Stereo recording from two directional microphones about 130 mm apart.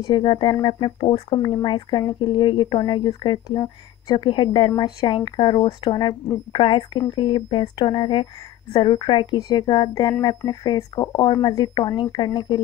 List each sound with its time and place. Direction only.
0.0 s speech: 35° left (ahead or behind)